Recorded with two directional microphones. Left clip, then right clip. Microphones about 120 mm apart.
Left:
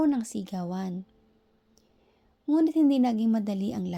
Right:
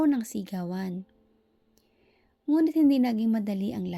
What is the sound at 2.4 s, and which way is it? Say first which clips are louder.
A woman's voice: even; 30° right (ahead or behind).